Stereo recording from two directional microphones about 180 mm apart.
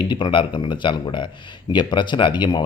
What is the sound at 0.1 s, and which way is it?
A man's voice, 25° left (ahead or behind).